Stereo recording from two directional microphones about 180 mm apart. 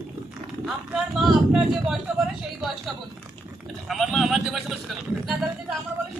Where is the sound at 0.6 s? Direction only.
5° right (ahead or behind).